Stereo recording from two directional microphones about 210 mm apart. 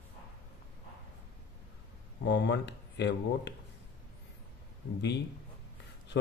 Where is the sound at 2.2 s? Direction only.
55° left (ahead or behind).